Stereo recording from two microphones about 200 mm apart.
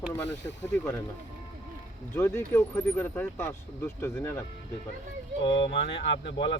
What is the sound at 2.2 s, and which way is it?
Speech, 10° left (ahead or behind).